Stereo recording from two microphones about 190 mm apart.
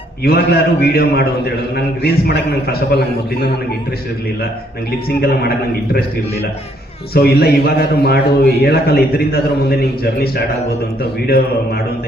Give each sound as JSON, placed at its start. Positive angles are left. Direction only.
{"t": 0.3, "sound": "a man's voice", "side_deg": 55}
{"t": 5.2, "sound": "a man's voice", "side_deg": 55}
{"t": 7.1, "sound": "a man's voice", "side_deg": 55}